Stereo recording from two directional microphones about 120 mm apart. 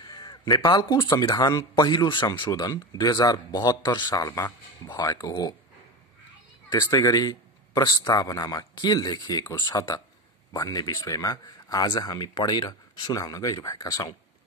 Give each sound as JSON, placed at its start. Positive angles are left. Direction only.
{"t": 0.0, "sound": "a sound", "side_deg": 35}
{"t": 0.7, "sound": "speech", "side_deg": 40}
{"t": 6.7, "sound": "a man's voice", "side_deg": 30}